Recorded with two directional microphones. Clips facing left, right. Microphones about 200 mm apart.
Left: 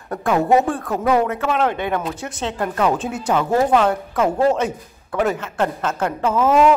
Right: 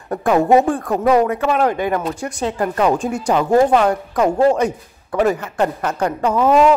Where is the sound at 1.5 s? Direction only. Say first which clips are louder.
Right 3 dB; 5° right (ahead or behind).